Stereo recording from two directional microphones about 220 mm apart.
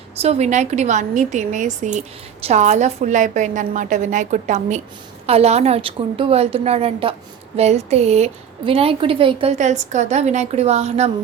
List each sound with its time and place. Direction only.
0.2 s a woman's voice: 30° right (ahead or behind)